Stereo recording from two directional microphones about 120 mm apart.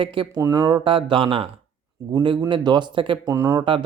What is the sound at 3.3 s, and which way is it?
Speech, 25° right (ahead or behind).